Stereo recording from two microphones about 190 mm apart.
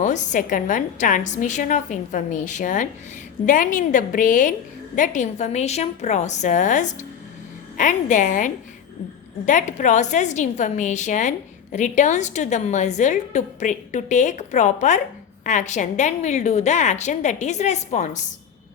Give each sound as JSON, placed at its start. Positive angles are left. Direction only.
{"t": 0.0, "sound": "a woman's voice", "side_deg": 40}